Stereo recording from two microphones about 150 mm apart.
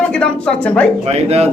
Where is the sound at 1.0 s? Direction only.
45° right (ahead or behind).